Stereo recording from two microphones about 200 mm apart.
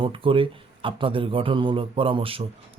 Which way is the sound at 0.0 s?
25° right (ahead or behind).